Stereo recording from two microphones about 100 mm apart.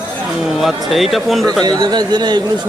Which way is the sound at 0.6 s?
Centre (ahead or behind).